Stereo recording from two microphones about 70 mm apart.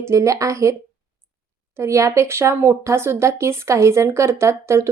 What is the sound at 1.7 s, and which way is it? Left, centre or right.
Speech, right.